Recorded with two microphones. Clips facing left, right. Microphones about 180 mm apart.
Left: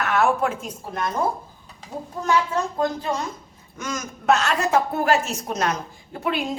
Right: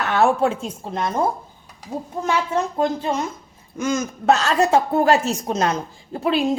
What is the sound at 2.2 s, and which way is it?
A woman's voice, 25° right (ahead or behind).